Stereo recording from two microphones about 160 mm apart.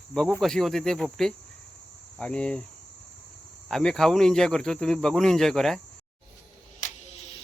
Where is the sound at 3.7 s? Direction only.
Centre (ahead or behind).